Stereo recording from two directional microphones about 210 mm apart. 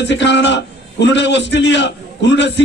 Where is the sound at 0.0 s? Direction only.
55° left (ahead or behind).